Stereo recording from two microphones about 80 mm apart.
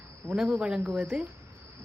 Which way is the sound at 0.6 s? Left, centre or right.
Centre.